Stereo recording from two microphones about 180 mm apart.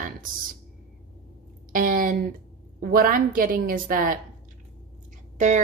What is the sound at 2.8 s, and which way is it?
A woman's voice, 50° right (ahead or behind).